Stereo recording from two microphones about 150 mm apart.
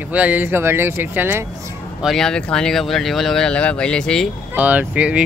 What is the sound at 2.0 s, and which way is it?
Speech, 5° left (ahead or behind).